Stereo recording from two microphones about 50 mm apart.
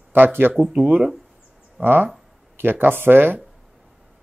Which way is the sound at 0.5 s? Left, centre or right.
Centre.